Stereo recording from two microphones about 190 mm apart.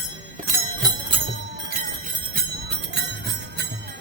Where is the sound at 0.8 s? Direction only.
20° right (ahead or behind).